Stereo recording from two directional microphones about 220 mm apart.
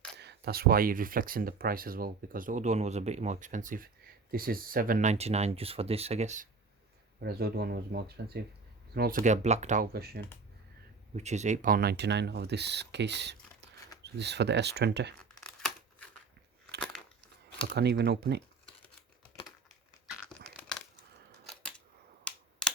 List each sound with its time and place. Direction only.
0.2 s speech: 50° right (ahead or behind)
7.2 s speech: 45° right (ahead or behind)
11.2 s speech: 30° right (ahead or behind); by 15.1 s 50° right (ahead or behind)
17.7 s speech: 50° right (ahead or behind)
20.6 s a sound: centre (ahead or behind)